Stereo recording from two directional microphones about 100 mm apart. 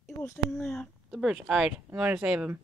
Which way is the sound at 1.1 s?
5° right (ahead or behind).